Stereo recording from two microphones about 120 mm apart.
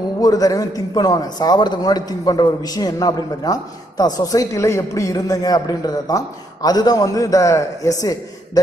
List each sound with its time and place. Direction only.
0.2 s a man's voice: 30° left (ahead or behind)